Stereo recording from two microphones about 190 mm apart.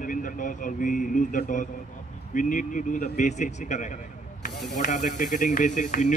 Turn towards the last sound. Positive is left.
turn(degrees=40)  # may be behind; listen again after turning